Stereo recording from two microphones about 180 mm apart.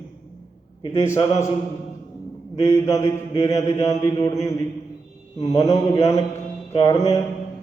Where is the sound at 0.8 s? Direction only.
15° left (ahead or behind).